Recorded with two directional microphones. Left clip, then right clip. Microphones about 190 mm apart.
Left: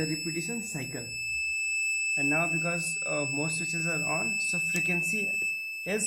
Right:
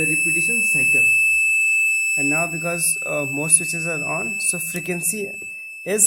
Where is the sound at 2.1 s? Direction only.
30° right (ahead or behind).